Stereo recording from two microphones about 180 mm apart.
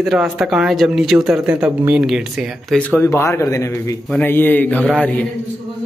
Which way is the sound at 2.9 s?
15° left (ahead or behind).